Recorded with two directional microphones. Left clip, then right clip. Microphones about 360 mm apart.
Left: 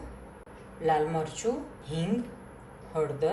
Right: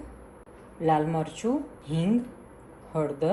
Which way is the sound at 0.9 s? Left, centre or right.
Centre.